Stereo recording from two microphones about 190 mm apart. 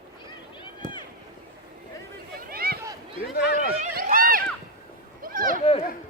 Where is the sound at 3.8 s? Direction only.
50° right (ahead or behind).